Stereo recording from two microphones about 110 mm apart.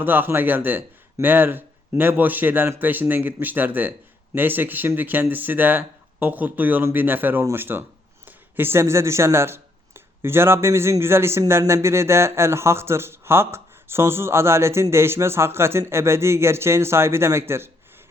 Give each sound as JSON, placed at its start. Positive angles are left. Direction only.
{"t": 0.0, "sound": "speech", "side_deg": -20}